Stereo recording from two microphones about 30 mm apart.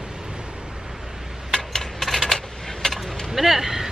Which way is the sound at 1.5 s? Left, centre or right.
Centre.